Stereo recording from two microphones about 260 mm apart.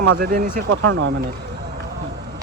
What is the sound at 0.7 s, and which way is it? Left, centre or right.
Speech, right.